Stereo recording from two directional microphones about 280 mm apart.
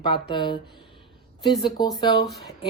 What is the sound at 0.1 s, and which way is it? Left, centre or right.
Speech, centre.